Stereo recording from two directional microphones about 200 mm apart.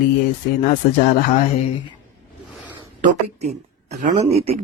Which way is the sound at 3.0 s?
35° right (ahead or behind).